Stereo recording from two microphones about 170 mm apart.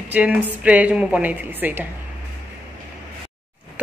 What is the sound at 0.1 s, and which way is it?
Speech, 10° right (ahead or behind).